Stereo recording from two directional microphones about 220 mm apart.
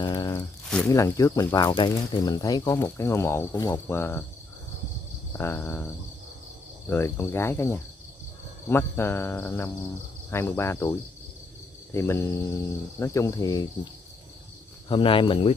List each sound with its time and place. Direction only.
0.0 s a sound: 20° left (ahead or behind)
0.8 s speech: 15° left (ahead or behind)
5.4 s speech: 10° left (ahead or behind)
6.9 s speech: 10° left (ahead or behind)
14.9 s speech: 25° left (ahead or behind)